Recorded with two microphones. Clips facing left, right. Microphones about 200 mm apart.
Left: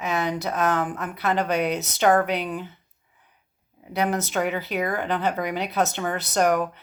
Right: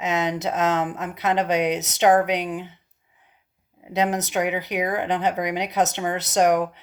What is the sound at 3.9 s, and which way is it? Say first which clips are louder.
Speech: right 2 dB; 20° right (ahead or behind).